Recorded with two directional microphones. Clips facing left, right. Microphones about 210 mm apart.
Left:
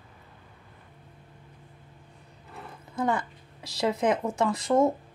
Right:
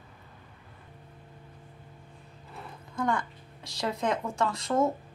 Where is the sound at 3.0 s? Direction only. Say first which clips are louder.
Left 2 dB; 20° left (ahead or behind).